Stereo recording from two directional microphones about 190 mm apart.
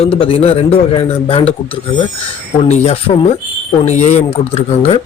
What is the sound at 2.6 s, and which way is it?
A man's voice, 35° left (ahead or behind).